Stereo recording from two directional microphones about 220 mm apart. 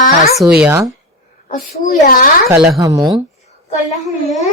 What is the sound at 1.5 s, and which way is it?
Speech, 35° left (ahead or behind).